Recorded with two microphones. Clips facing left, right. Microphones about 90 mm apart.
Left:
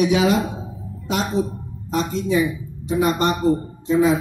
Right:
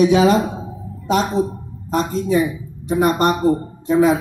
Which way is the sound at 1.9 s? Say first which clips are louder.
Right 3 dB; 40° right (ahead or behind).